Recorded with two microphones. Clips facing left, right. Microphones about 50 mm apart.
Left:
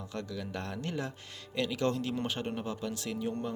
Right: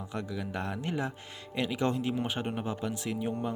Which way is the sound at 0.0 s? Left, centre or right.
Centre.